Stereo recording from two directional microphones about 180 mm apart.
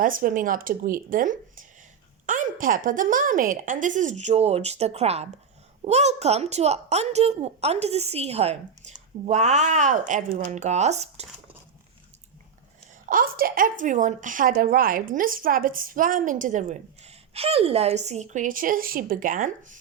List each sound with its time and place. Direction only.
0.0 s a woman's voice: 50° right (ahead or behind)
13.1 s a woman's voice: 55° right (ahead or behind)